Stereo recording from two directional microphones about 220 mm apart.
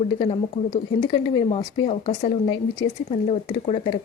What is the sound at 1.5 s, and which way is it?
A woman's voice, 25° left (ahead or behind).